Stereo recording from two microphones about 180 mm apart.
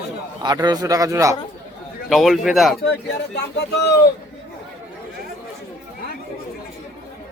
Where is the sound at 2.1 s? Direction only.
Centre (ahead or behind).